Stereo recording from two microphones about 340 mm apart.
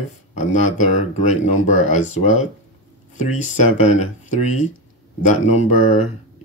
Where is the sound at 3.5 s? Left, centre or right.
Left.